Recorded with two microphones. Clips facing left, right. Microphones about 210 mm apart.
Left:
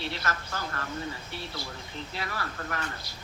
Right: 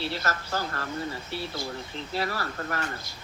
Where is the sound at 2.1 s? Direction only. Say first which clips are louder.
Right 7 dB; 35° right (ahead or behind).